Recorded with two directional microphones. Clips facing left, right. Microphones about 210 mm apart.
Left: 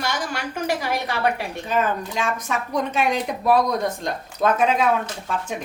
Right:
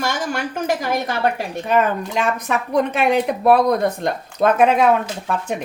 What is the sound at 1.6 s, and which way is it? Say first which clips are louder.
A woman's voice: right 5 dB; 60° right (ahead or behind).